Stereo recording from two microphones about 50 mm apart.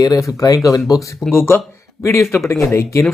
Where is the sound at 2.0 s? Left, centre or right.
Left.